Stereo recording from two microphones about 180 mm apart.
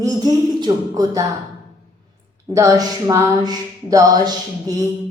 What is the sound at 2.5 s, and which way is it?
Speech, 20° right (ahead or behind).